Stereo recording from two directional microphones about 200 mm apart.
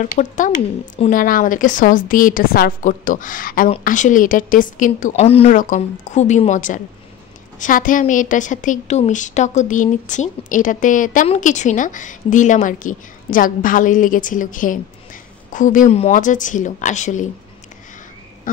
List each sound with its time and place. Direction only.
0.0 s a woman's voice: 40° left (ahead or behind)
1.1 s a woman's voice: 45° left (ahead or behind)